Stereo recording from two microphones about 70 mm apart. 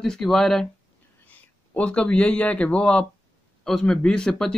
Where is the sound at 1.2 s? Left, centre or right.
Centre.